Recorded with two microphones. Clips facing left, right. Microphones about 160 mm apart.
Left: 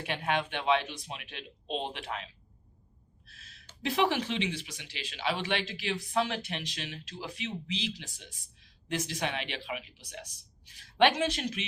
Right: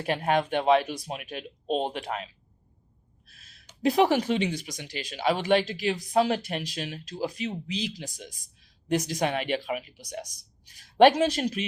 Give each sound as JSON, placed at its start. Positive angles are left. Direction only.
{"t": 0.0, "sound": "speech", "side_deg": -45}
{"t": 3.8, "sound": "speech", "side_deg": -45}